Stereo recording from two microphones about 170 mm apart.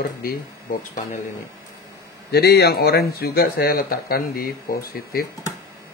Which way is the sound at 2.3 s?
70° left (ahead or behind).